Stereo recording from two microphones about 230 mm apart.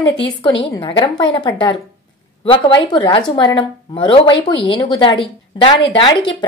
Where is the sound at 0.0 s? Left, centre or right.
Left.